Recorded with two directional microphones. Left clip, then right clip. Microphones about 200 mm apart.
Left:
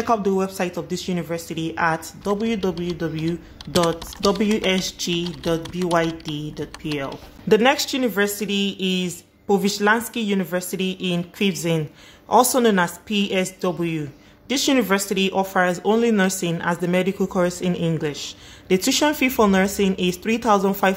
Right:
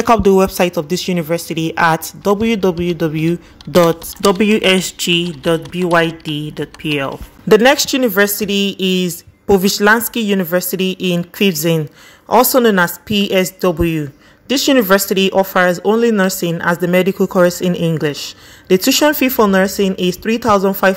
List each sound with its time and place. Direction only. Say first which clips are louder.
0.0 s speech: right 10 dB; 35° right (ahead or behind); by 20.9 s 15° right (ahead or behind)